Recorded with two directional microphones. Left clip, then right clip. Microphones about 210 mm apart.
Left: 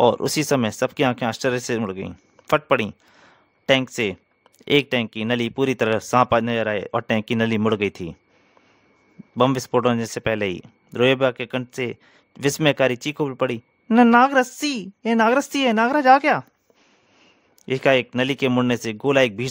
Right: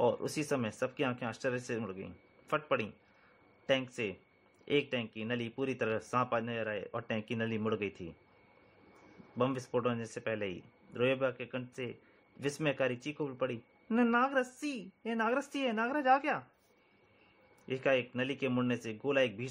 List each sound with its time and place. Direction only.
0.0 s speech: 55° left (ahead or behind)
9.4 s speech: 55° left (ahead or behind)
17.6 s speech: 55° left (ahead or behind)